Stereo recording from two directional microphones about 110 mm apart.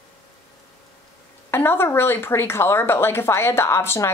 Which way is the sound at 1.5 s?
20° left (ahead or behind).